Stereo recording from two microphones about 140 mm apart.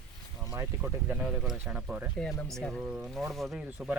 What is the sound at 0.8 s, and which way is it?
Speech, 10° right (ahead or behind).